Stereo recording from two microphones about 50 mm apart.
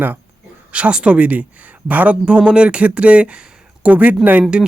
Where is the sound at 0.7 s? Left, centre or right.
Right.